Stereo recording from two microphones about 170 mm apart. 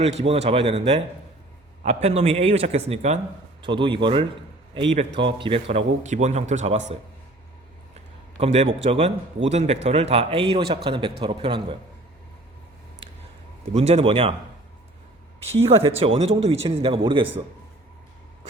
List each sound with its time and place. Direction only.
0.0 s a man's voice: 40° right (ahead or behind)
3.6 s a man's voice: 30° right (ahead or behind)
8.4 s a man's voice: 40° right (ahead or behind)
13.7 s a man's voice: 35° right (ahead or behind)
15.6 s a man's voice: 35° right (ahead or behind)